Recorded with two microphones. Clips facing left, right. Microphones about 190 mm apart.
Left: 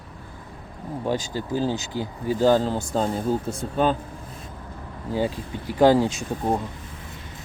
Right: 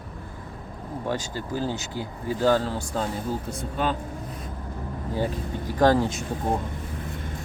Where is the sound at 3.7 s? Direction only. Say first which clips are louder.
Left 5 dB; 40° left (ahead or behind).